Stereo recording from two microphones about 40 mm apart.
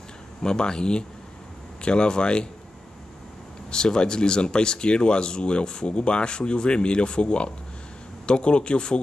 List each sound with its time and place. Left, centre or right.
0.4 s speech: centre
3.7 s speech: centre